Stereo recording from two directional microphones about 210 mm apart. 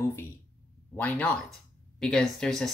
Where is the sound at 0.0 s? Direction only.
10° left (ahead or behind).